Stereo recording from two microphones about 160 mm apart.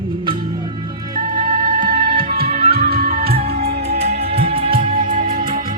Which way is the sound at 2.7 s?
75° right (ahead or behind).